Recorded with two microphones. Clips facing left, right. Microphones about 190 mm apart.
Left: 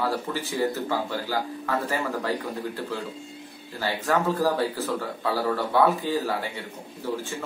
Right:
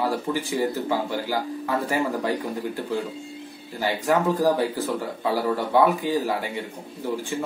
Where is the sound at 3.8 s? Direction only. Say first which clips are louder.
Right 3 dB; 15° right (ahead or behind).